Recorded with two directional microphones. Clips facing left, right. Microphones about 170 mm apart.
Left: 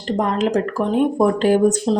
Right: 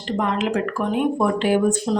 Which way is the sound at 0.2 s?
40° left (ahead or behind).